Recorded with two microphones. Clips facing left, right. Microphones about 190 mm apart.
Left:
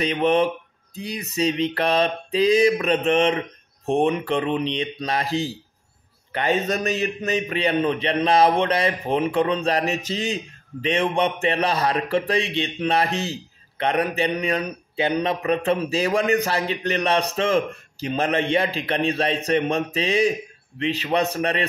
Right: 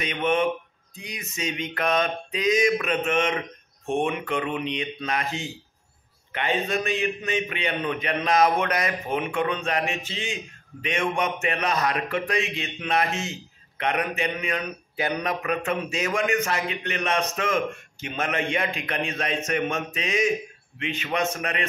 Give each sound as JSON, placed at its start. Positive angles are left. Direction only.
{"t": 0.0, "sound": "a man's voice", "side_deg": 35}